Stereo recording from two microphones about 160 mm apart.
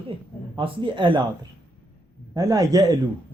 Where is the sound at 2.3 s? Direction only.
25° right (ahead or behind).